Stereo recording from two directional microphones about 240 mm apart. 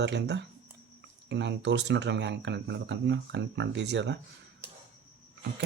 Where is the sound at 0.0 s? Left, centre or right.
Right.